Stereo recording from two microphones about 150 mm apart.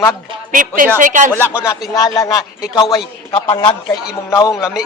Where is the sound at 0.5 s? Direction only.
65° right (ahead or behind).